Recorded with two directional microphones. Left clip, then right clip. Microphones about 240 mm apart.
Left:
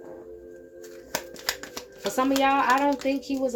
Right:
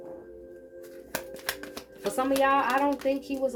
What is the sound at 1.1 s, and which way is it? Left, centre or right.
Shuffling cards, centre.